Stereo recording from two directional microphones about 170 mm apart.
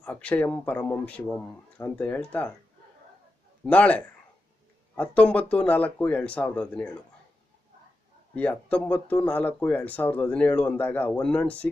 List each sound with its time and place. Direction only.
0.0 s speech: 5° left (ahead or behind)
3.7 s speech: 10° left (ahead or behind)
8.4 s speech: 10° left (ahead or behind)